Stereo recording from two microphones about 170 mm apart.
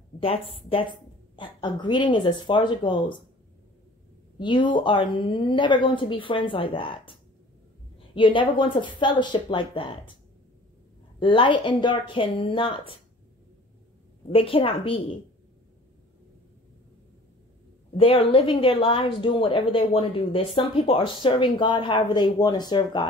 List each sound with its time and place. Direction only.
0.7 s speech: 30° left (ahead or behind)
4.4 s speech: 25° left (ahead or behind)
11.1 s speech: 30° left (ahead or behind)
14.3 s a woman's voice: 30° left (ahead or behind)
17.9 s speech: 30° left (ahead or behind)